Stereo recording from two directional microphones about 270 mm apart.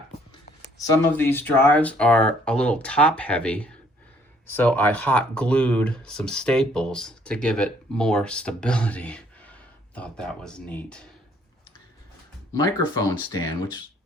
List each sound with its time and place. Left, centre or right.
0.8 s speech: centre
12.5 s speech: centre